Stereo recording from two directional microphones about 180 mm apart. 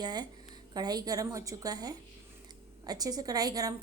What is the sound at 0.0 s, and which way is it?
A woman's voice, 25° right (ahead or behind).